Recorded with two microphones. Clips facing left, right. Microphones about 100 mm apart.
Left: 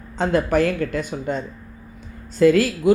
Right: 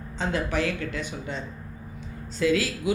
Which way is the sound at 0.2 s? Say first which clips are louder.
Left 8 dB; 50° left (ahead or behind).